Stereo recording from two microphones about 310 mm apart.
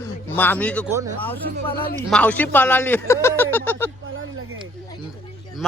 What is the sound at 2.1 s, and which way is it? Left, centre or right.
Speech, centre.